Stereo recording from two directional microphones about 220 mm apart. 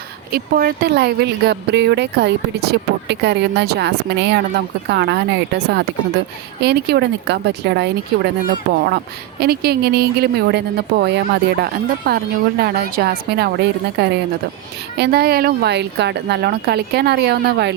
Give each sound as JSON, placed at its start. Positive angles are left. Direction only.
{"t": 0.3, "sound": "speech", "side_deg": -45}
{"t": 9.4, "sound": "speech", "side_deg": -45}